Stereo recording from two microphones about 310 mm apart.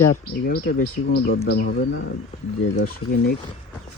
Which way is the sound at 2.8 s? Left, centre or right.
Left.